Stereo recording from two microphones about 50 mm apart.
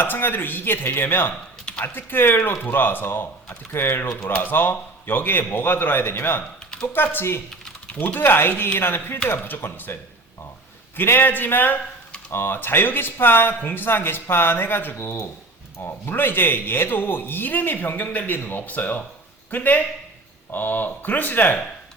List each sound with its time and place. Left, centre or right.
0.0 s a man's voice: left
4.3 s a man's voice: left
7.9 s a man's voice: left
10.9 s a man's voice: left
14.9 s a man's voice: left